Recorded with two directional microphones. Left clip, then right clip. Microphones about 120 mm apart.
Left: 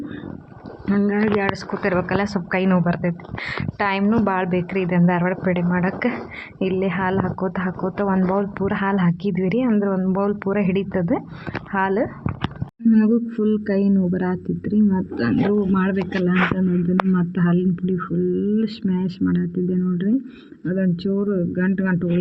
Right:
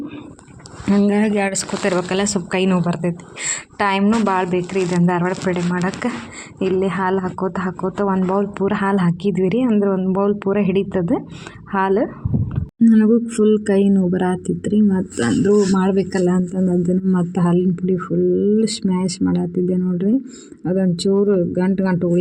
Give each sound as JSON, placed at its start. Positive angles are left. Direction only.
{"t": 1.1, "sound": "speech", "side_deg": -55}
{"t": 2.0, "sound": "speech", "side_deg": -35}
{"t": 3.1, "sound": "speech", "side_deg": -40}
{"t": 5.7, "sound": "speech", "side_deg": -25}
{"t": 9.7, "sound": "speech", "side_deg": -25}
{"t": 15.8, "sound": "speech", "side_deg": -50}
{"t": 17.1, "sound": "speech", "side_deg": -20}